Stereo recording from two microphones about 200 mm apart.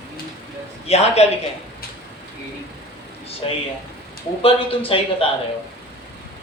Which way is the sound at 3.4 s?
25° left (ahead or behind).